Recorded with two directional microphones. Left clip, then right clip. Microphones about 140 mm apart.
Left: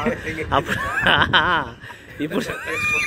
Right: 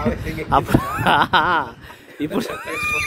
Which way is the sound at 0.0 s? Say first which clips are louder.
Left 1 dB; 25° right (ahead or behind).